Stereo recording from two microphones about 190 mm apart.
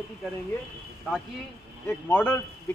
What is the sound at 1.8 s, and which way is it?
Speech, 10° left (ahead or behind).